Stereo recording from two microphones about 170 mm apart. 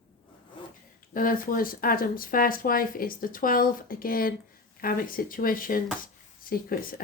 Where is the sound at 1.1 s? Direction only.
55° left (ahead or behind).